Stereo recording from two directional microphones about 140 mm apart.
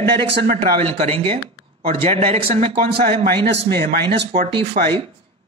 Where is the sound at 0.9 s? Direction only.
45° right (ahead or behind).